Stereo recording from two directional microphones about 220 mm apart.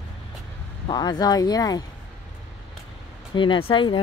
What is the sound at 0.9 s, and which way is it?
Speech, 20° left (ahead or behind).